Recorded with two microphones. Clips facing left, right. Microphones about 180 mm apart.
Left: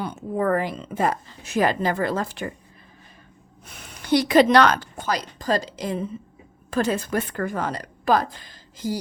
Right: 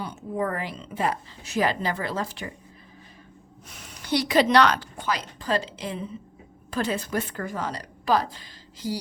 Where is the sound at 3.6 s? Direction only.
60° left (ahead or behind).